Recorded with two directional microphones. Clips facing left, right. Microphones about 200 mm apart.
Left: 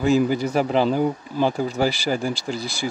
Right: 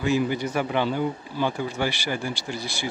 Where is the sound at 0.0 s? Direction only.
40° left (ahead or behind).